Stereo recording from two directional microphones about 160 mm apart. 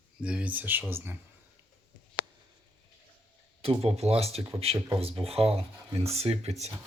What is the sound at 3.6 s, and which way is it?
Speech, 40° right (ahead or behind).